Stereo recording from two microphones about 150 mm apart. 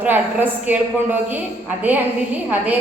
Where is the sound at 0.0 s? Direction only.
10° right (ahead or behind).